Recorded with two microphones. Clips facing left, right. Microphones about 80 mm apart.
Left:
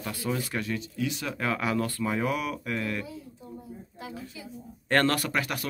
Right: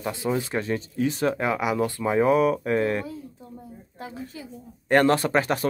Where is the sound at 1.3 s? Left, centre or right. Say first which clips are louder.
Right 4 dB; centre; by 3.1 s right.